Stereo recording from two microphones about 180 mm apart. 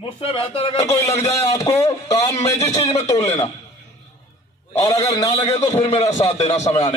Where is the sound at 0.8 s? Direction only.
15° left (ahead or behind).